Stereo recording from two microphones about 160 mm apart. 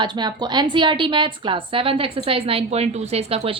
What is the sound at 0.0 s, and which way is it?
A woman's voice, 25° right (ahead or behind).